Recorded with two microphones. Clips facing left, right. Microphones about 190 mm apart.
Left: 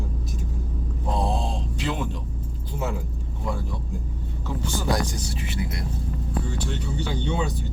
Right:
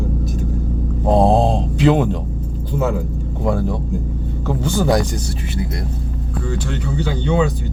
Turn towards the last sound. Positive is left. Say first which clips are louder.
# right 9 dB
turn(degrees=-90)